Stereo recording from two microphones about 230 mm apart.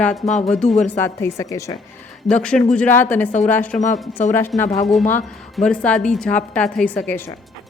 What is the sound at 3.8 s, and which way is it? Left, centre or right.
Speech, left.